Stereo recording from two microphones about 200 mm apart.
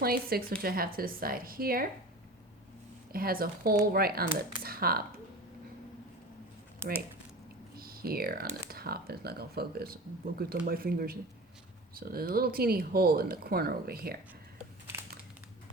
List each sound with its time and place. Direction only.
0.0 s speech: 50° right (ahead or behind)
3.1 s speech: 50° right (ahead or behind)
7.8 s speech: 50° right (ahead or behind)